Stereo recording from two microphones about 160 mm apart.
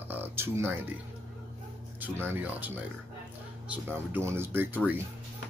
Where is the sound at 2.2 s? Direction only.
10° right (ahead or behind).